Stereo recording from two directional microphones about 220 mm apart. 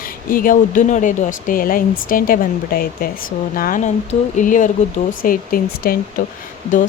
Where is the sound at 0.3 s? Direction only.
40° left (ahead or behind).